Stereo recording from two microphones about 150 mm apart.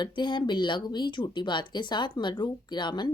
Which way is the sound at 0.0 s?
30° left (ahead or behind).